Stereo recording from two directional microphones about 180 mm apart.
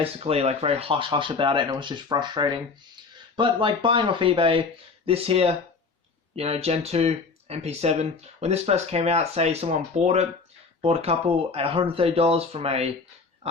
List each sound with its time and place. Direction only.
0.0 s speech: 35° right (ahead or behind)